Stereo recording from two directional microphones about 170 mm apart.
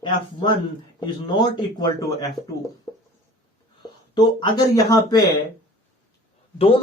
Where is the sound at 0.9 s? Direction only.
25° left (ahead or behind).